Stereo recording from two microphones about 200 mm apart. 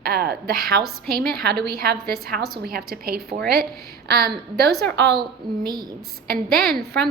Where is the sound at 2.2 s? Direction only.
50° right (ahead or behind).